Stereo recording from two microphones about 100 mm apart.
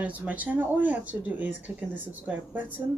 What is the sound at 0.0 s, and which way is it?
Speech, 15° right (ahead or behind).